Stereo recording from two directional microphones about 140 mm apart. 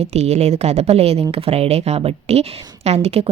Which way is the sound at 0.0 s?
50° right (ahead or behind).